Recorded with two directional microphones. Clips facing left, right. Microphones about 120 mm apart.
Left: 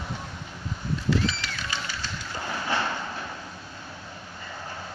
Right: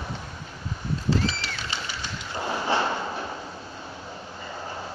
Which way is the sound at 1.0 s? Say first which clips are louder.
Even; 35° right (ahead or behind).